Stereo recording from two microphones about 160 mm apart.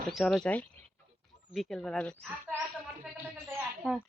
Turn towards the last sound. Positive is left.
turn(degrees=-5)  # may be behind; listen again after turning